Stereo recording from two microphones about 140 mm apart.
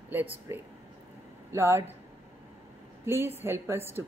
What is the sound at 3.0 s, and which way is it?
A woman's voice, 20° right (ahead or behind).